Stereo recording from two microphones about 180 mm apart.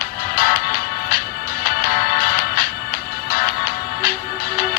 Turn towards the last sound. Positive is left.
turn(degrees=55)  # may be behind; listen again after turning